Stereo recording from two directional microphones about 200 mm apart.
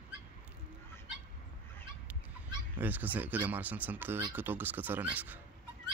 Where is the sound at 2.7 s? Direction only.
10° right (ahead or behind).